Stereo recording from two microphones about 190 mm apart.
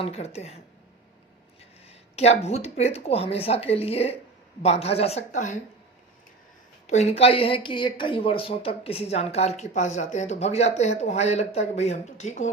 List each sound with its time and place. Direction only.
0.0 s speech: 35° left (ahead or behind)
1.9 s speech: 35° left (ahead or behind)
6.8 s speech: 35° left (ahead or behind)